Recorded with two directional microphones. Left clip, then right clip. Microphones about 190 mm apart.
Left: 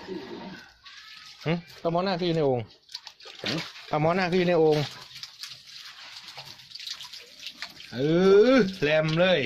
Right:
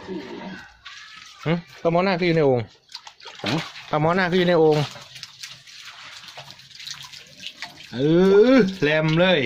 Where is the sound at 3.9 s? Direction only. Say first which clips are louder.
Right 4 dB; 10° left (ahead or behind).